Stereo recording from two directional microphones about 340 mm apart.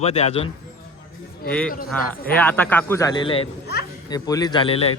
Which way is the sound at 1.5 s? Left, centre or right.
Centre.